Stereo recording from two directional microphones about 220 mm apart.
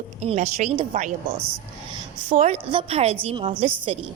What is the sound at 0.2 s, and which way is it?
Speech, 30° right (ahead or behind).